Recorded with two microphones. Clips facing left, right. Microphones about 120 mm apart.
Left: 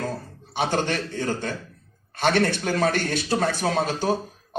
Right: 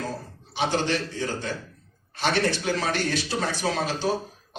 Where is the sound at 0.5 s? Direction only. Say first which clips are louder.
Left 1 dB; 50° left (ahead or behind).